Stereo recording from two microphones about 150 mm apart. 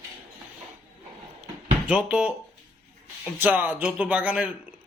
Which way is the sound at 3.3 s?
10° right (ahead or behind).